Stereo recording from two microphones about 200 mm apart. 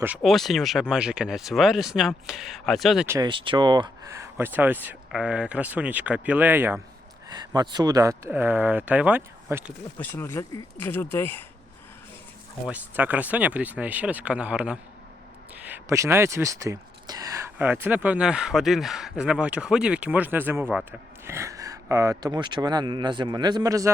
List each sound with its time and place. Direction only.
0.0 s speech: 5° right (ahead or behind)
3.1 s speech: 20° right (ahead or behind)
10.0 s speech: 10° left (ahead or behind)
12.6 s speech: 10° right (ahead or behind)